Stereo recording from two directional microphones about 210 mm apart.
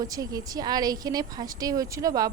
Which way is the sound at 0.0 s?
15° right (ahead or behind).